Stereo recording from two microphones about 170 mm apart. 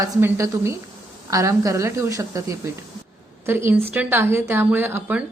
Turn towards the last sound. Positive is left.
turn(degrees=-10)  # may be behind; listen again after turning